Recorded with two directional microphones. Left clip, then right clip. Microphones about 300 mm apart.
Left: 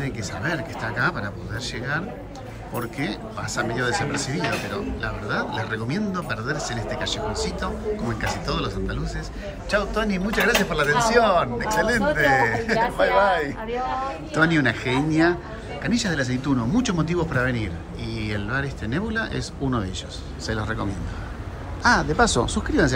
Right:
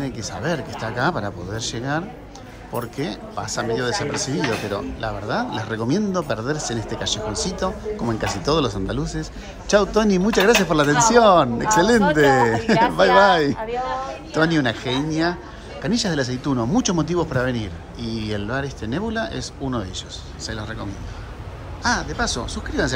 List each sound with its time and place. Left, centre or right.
0.0 s speech: centre
14.3 s speech: centre